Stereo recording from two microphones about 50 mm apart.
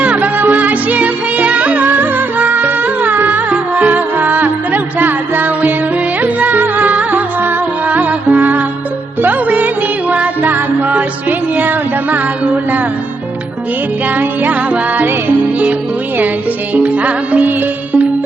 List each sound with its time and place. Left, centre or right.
0.0 s music: right
14.2 s music: right
16.7 s music: right